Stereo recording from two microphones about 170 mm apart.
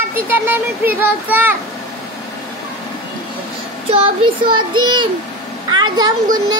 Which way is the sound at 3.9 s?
35° right (ahead or behind).